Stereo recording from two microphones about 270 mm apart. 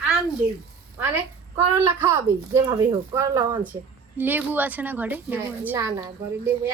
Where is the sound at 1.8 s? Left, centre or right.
Centre.